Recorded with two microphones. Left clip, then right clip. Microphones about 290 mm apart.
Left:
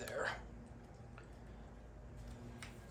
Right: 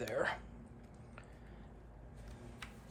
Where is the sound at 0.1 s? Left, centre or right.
Right.